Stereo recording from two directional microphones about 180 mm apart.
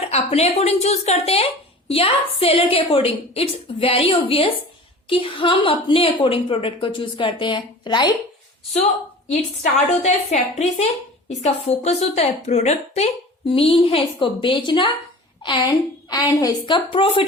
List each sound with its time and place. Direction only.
0.0 s a woman's voice: 35° left (ahead or behind)
9.3 s a woman's voice: 35° left (ahead or behind)